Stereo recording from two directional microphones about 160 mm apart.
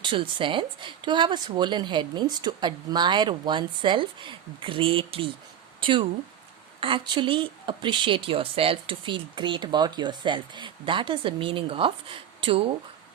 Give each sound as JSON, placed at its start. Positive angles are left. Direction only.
{"t": 0.0, "sound": "a woman's voice", "side_deg": -30}